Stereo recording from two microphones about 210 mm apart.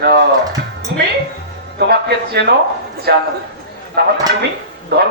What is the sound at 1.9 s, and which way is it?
A man's voice, 50° right (ahead or behind).